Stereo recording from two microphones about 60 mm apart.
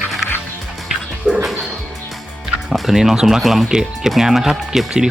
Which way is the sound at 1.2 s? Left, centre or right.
Centre.